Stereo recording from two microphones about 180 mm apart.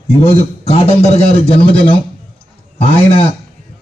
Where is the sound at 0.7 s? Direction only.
35° left (ahead or behind).